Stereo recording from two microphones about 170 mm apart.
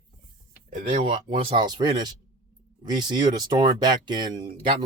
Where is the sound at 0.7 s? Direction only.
45° right (ahead or behind).